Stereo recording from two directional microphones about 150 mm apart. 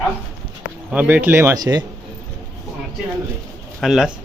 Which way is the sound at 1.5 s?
25° right (ahead or behind).